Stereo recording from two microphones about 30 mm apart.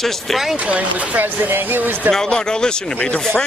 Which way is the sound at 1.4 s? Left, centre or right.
Right.